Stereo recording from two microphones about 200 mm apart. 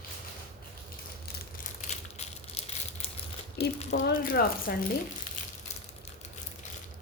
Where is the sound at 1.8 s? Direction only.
35° left (ahead or behind).